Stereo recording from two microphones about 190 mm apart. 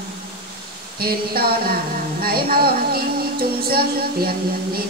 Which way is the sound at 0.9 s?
55° right (ahead or behind).